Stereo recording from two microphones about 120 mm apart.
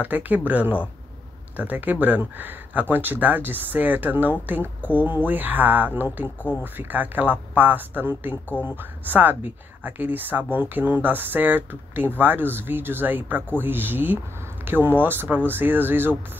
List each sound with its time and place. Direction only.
0.0 s speech: 15° right (ahead or behind)